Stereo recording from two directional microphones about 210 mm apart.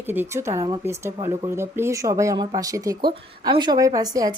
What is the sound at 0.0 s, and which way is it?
Speech, 10° right (ahead or behind).